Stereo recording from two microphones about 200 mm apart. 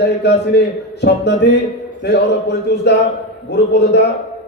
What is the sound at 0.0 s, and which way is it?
A man's voice, 55° left (ahead or behind).